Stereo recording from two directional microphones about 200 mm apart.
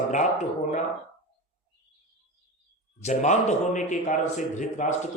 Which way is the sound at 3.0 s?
35° left (ahead or behind).